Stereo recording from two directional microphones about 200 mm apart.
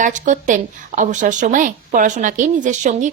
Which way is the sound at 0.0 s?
40° right (ahead or behind).